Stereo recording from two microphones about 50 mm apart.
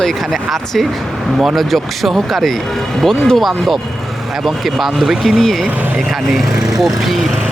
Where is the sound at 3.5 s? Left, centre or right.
Centre.